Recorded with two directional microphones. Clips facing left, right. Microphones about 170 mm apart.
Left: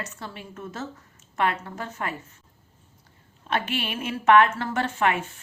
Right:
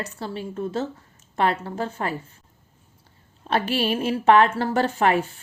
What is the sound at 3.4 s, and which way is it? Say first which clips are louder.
A woman's voice: right 5 dB; 35° right (ahead or behind).